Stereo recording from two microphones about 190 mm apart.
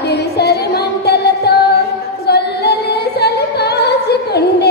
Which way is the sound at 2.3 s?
60° left (ahead or behind).